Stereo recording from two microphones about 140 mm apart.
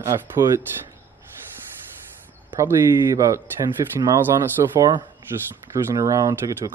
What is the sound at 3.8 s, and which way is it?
Speech, 25° right (ahead or behind).